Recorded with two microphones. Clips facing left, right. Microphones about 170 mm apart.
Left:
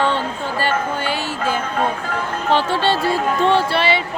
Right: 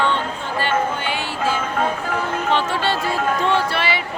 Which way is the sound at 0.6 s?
40° left (ahead or behind).